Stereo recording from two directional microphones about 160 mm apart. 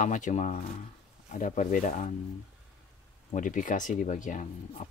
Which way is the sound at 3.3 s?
55° left (ahead or behind).